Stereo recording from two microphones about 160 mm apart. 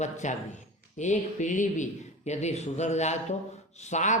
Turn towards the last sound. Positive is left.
turn(degrees=50)  # may be behind; listen again after turning